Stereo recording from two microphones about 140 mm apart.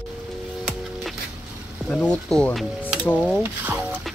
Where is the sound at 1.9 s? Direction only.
5° left (ahead or behind).